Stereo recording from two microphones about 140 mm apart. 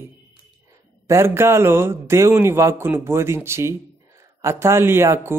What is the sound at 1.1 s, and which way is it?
A man's voice, 20° right (ahead or behind).